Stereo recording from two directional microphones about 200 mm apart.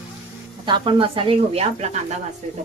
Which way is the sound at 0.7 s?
25° right (ahead or behind).